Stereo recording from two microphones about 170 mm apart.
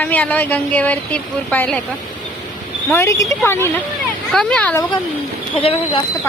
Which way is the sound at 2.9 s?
15° left (ahead or behind).